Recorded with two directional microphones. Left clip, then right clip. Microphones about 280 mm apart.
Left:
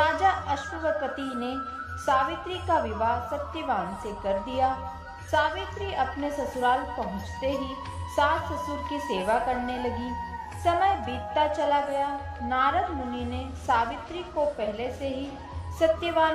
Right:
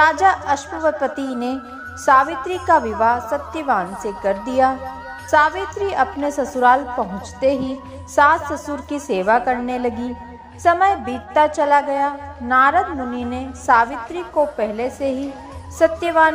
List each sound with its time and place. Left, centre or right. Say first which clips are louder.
0.0 s a woman's voice: right 9 dB; right